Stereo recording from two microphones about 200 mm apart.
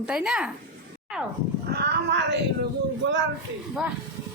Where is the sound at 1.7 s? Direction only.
55° right (ahead or behind).